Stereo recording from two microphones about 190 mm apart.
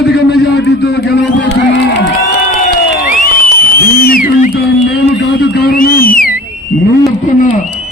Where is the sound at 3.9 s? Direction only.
50° left (ahead or behind).